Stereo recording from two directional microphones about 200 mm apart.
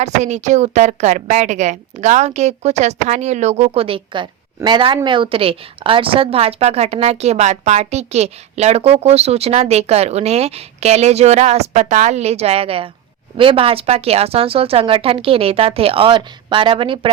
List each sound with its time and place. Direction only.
0.0 s a woman's voice: 35° right (ahead or behind)